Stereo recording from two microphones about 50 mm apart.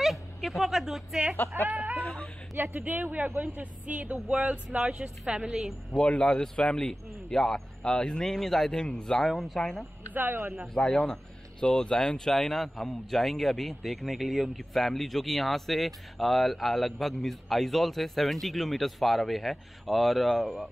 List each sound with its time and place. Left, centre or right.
0.0 s speech: centre
1.5 s a woman's voice: right; by 5.7 s centre
5.9 s speech: left
9.3 s a man's voice: centre
10.1 s speech: right
10.7 s a man's voice: centre